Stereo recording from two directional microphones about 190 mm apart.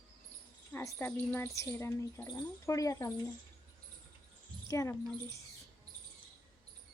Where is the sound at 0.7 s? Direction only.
10° left (ahead or behind).